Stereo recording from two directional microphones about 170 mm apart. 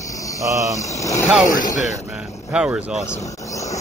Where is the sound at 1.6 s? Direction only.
45° left (ahead or behind).